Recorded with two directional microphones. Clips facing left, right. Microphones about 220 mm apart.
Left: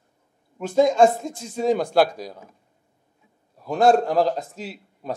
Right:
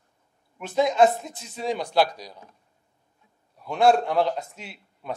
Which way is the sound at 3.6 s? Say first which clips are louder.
Left 2 dB; 40° left (ahead or behind).